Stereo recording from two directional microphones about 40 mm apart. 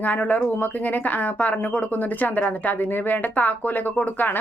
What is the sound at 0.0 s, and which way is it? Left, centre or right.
A woman's voice, left.